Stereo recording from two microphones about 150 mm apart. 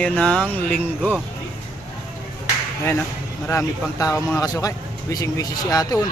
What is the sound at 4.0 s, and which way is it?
Speech, 20° left (ahead or behind).